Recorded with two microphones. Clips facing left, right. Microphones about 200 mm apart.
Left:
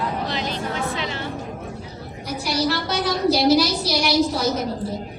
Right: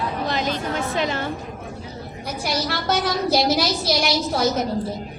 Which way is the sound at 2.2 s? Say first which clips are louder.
Left 3 dB; 50° right (ahead or behind).